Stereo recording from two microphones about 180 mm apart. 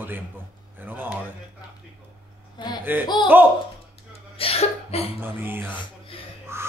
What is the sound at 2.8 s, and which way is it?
Speech, 10° right (ahead or behind).